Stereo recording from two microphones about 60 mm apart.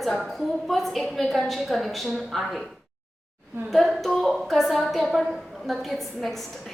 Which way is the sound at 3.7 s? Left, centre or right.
Centre.